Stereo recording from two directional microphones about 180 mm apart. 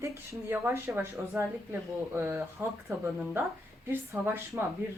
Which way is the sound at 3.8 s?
15° right (ahead or behind).